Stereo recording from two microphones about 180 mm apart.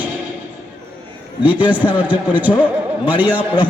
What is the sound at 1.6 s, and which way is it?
A man's voice, 10° right (ahead or behind).